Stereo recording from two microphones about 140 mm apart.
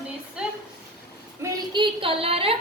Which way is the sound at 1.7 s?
40° right (ahead or behind).